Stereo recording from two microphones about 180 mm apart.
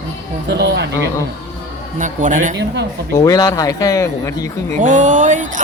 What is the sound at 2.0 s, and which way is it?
Speech, 45° right (ahead or behind).